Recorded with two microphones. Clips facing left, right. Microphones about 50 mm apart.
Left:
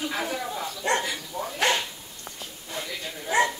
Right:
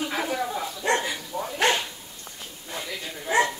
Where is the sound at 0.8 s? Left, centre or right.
Right.